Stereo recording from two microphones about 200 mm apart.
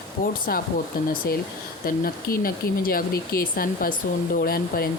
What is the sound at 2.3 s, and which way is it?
Speech, 45° left (ahead or behind).